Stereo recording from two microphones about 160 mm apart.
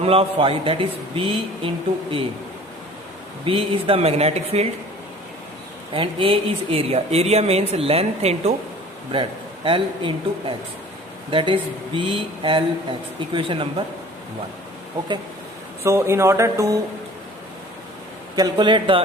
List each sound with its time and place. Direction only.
0.0 s speech: 35° right (ahead or behind)
3.4 s speech: 35° right (ahead or behind)
5.9 s speech: 35° right (ahead or behind)
9.6 s speech: 35° right (ahead or behind)
15.8 s speech: 15° right (ahead or behind)
18.3 s speech: 25° right (ahead or behind)